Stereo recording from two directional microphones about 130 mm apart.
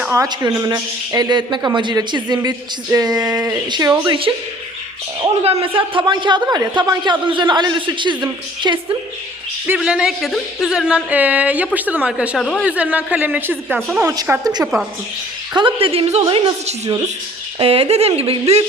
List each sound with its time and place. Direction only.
0.1 s a man's voice: 30° right (ahead or behind)
5.2 s a man's voice: 50° right (ahead or behind)
9.7 s speech: 5° right (ahead or behind)
12.4 s a man's voice: 5° left (ahead or behind)
12.6 s speech: 10° right (ahead or behind)
13.7 s a woman's voice: 5° left (ahead or behind)
14.3 s speech: 10° right (ahead or behind)
15.5 s a woman's voice: 40° right (ahead or behind); by 16.9 s 60° right (ahead or behind)
17.6 s a woman's voice: 45° right (ahead or behind)